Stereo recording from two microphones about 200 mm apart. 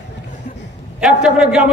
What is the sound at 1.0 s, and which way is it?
Speech, 5° right (ahead or behind).